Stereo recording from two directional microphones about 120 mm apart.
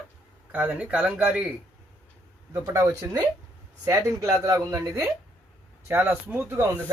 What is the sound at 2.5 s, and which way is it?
Speech, 25° right (ahead or behind).